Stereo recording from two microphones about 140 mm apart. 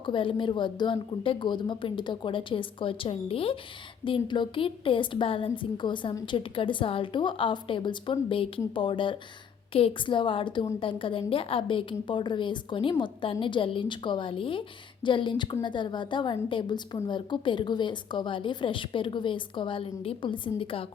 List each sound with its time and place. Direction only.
0.0 s a woman's voice: 35° left (ahead or behind)